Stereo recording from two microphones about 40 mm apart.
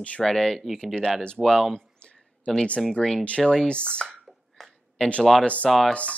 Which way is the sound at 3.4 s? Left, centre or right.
Centre.